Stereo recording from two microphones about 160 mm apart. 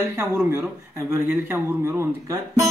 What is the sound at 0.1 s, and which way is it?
Speech, 15° right (ahead or behind).